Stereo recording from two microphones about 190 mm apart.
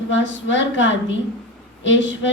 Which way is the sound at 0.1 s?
75° left (ahead or behind).